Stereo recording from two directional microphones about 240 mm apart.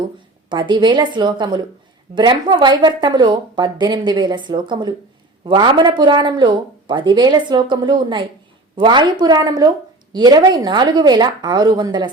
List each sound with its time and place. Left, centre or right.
0.5 s a woman's voice: centre